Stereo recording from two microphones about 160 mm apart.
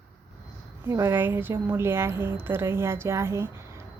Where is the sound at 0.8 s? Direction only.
15° right (ahead or behind).